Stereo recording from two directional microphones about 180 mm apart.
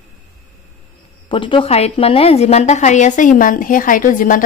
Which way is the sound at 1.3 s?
30° left (ahead or behind).